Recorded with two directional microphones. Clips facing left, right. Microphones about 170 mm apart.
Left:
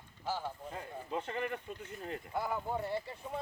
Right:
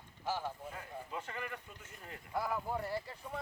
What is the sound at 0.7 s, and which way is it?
Speech, 30° left (ahead or behind).